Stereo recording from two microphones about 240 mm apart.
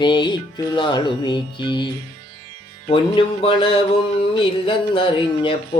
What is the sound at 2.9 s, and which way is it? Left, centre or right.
Music, left.